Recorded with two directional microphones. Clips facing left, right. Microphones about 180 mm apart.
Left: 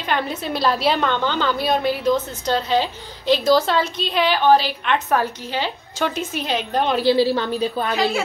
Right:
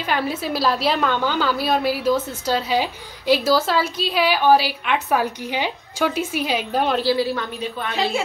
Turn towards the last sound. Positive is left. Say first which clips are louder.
# left 6 dB
turn(degrees=35)  # may be behind; listen again after turning